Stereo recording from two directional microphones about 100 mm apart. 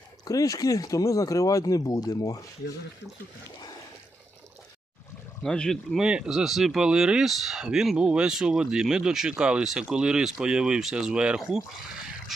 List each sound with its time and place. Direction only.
0.3 s speech: 35° left (ahead or behind)
5.4 s speech: 5° left (ahead or behind)
6.0 s speech: 5° right (ahead or behind)